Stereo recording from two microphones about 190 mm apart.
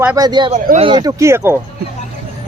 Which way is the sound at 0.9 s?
20° right (ahead or behind).